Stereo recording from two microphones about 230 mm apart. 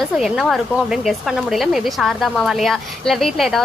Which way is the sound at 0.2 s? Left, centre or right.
Centre.